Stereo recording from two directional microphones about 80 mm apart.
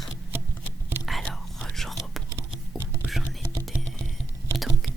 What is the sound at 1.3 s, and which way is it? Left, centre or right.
Whispering, centre.